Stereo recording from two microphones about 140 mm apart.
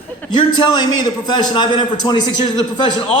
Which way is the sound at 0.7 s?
30° left (ahead or behind).